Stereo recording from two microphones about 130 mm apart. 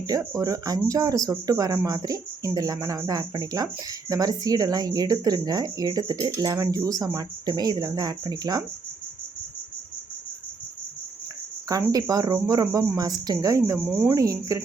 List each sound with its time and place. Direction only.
0.1 s speech: 25° right (ahead or behind)
11.9 s speech: 30° right (ahead or behind)
13.8 s speech: 5° right (ahead or behind)
14.1 s speech: 25° right (ahead or behind)